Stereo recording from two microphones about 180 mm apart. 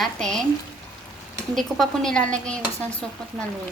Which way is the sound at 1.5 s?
Centre (ahead or behind).